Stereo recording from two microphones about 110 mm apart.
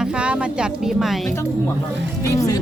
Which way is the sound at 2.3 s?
30° left (ahead or behind).